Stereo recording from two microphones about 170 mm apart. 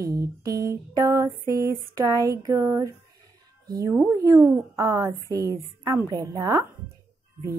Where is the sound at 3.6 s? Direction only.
20° right (ahead or behind).